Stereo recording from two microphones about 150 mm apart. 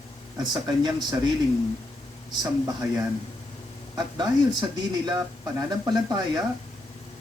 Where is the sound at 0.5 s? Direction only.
30° right (ahead or behind).